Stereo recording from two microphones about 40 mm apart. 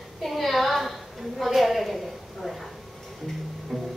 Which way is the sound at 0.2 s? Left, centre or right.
Centre.